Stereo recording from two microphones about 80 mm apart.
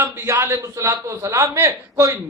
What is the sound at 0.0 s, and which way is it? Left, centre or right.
A man's voice, right.